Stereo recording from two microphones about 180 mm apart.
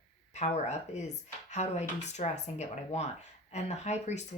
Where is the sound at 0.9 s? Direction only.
40° left (ahead or behind).